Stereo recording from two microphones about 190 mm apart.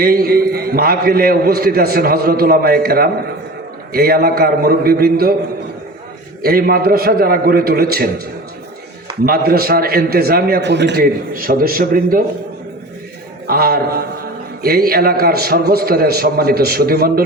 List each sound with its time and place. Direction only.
0.0 s a man's voice: 50° right (ahead or behind)
6.4 s a man's voice: 50° right (ahead or behind)
9.2 s a man's voice: 55° right (ahead or behind)
13.5 s a man's voice: 50° right (ahead or behind)